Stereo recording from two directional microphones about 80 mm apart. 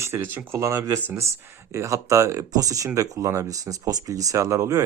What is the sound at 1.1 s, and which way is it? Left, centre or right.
Speech, right.